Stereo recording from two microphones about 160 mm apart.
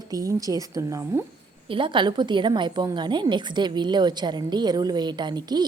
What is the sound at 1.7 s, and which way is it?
A woman's voice, 30° right (ahead or behind).